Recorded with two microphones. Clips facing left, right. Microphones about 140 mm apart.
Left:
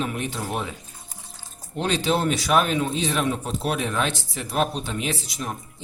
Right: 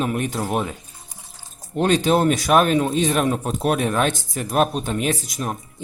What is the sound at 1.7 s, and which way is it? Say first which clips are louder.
A man's voice: right 6 dB; 50° right (ahead or behind).